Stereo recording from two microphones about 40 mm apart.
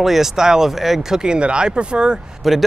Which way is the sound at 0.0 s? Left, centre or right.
Centre.